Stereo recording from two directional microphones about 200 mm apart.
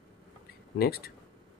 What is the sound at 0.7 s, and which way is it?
Speech, 50° left (ahead or behind).